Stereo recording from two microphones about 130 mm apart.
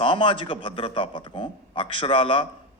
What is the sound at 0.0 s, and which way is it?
A man's voice, 40° left (ahead or behind).